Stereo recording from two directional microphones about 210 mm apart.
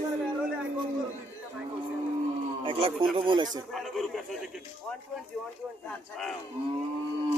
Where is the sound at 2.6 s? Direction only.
25° right (ahead or behind).